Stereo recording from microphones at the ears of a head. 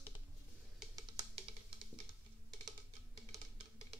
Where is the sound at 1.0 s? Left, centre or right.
Right.